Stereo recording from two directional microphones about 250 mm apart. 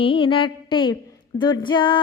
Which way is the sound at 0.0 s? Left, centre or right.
Left.